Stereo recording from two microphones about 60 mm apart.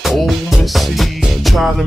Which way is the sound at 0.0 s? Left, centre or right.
Centre.